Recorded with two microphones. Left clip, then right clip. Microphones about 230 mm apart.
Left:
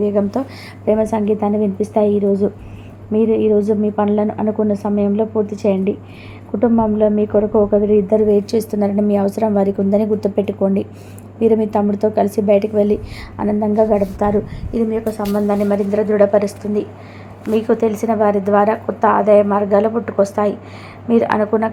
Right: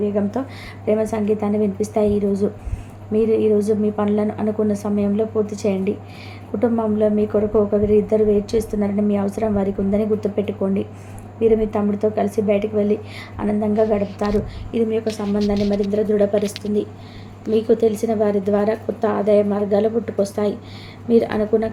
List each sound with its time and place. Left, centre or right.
0.0 s a woman's voice: left